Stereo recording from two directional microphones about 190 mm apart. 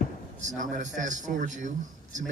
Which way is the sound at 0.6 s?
40° right (ahead or behind).